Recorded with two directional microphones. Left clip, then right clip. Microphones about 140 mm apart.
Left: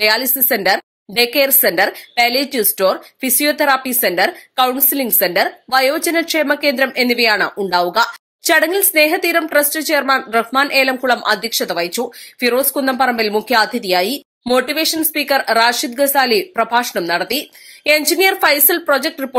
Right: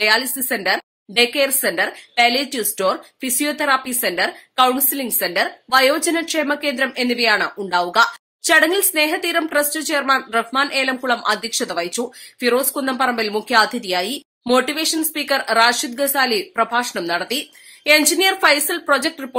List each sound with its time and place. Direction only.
0.0 s a woman's voice: 35° left (ahead or behind)